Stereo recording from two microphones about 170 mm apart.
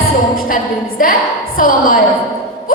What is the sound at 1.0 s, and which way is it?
A woman's voice, 55° left (ahead or behind).